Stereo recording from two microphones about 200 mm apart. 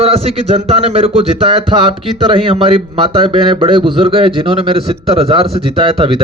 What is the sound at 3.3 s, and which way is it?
A man's voice, 25° right (ahead or behind).